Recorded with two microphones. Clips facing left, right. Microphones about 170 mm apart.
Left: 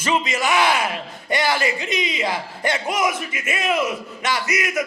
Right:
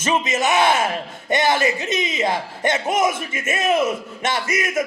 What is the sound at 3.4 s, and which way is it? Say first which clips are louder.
Speech: right 4 dB; 45° right (ahead or behind).